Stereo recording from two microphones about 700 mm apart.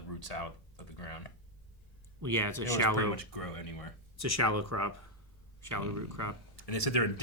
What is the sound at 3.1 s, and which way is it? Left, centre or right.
Speech, left.